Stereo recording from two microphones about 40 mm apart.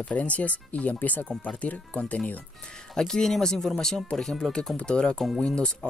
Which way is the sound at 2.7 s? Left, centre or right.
Centre.